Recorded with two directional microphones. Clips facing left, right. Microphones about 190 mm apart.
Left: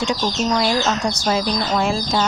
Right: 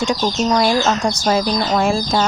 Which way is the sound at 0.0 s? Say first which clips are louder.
Right 3 dB; 45° right (ahead or behind).